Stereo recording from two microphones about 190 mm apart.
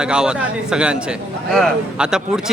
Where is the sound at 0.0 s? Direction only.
5° right (ahead or behind).